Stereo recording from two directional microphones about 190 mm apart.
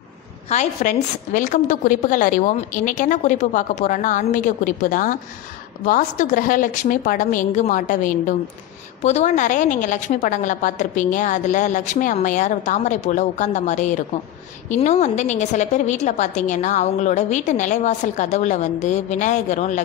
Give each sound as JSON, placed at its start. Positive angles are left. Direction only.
{"t": 0.5, "sound": "a woman's voice", "side_deg": 40}